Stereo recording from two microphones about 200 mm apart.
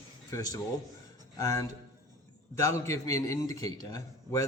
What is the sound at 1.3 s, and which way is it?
A man's voice, 15° left (ahead or behind).